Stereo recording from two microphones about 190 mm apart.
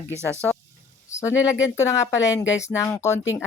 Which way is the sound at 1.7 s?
15° left (ahead or behind).